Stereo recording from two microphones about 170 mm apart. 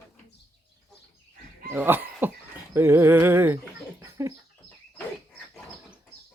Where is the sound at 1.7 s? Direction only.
15° right (ahead or behind).